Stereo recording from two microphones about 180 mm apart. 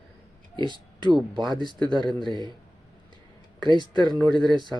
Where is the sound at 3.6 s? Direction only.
25° right (ahead or behind).